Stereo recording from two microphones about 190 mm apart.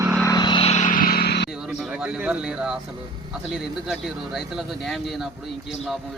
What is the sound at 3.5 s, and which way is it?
Speech, centre (ahead or behind).